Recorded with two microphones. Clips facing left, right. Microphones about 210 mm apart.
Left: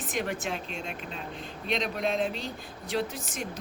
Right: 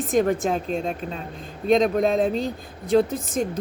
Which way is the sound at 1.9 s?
45° right (ahead or behind).